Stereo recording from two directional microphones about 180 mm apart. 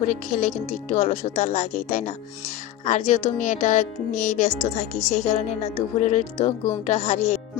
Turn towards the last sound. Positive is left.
turn(degrees=40)  # may be behind; listen again after turning